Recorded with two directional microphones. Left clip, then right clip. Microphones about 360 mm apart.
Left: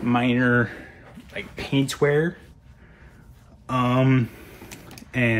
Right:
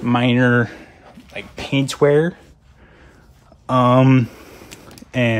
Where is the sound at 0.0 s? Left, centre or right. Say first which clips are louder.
Right 5 dB; right.